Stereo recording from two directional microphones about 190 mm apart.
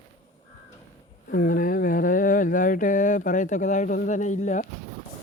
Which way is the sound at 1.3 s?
45° left (ahead or behind).